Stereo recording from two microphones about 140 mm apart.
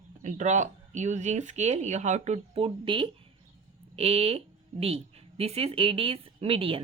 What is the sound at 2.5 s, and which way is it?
Speech, 40° right (ahead or behind).